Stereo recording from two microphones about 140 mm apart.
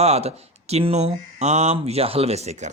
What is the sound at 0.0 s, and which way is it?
A man's voice, 50° right (ahead or behind).